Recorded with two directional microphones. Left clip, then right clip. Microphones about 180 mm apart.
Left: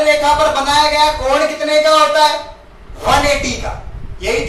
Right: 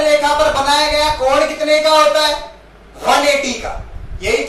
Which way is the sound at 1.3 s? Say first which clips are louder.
Right 1 dB; 15° right (ahead or behind).